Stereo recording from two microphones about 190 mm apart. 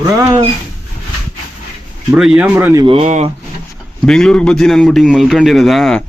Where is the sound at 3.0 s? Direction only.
40° right (ahead or behind).